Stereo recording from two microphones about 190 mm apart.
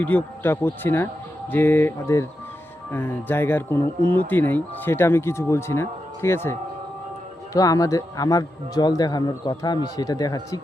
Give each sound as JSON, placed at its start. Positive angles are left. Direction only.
{"t": 0.0, "sound": "speech", "side_deg": 10}